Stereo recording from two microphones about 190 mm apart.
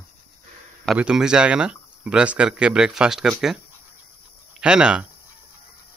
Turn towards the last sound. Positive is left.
turn(degrees=-5)  # may be behind; listen again after turning